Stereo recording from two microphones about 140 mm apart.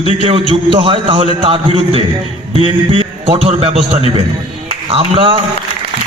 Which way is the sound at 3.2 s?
45° right (ahead or behind).